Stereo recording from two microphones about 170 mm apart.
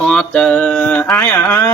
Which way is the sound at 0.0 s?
5° left (ahead or behind).